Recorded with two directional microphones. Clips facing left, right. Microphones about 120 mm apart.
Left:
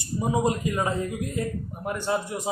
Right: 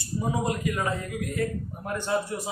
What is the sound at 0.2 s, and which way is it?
A man's voice, 20° left (ahead or behind).